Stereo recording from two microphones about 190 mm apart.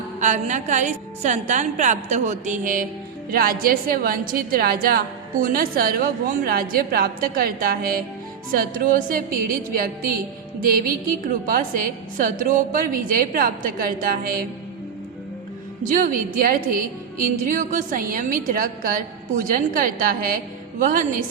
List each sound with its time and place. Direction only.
0.2 s a woman's voice: 40° right (ahead or behind)
15.8 s a woman's voice: 45° right (ahead or behind)